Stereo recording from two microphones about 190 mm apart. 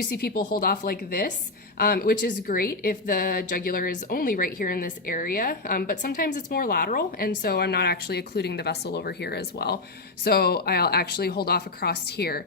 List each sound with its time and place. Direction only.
0.0 s a woman's voice: 55° left (ahead or behind)